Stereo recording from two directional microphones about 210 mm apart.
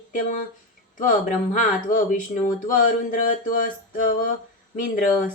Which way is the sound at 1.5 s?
40° left (ahead or behind).